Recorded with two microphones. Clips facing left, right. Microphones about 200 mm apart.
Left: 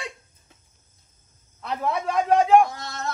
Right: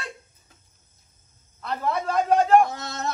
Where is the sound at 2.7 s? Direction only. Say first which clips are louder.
Right 2 dB; 20° right (ahead or behind).